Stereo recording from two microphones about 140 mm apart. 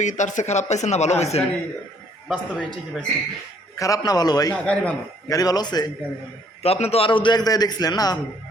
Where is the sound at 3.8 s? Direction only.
25° left (ahead or behind).